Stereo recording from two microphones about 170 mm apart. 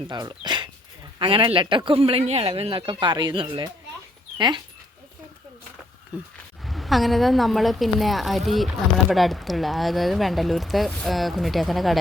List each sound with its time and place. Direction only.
0.1 s speech: 25° right (ahead or behind)
6.3 s speech: centre (ahead or behind)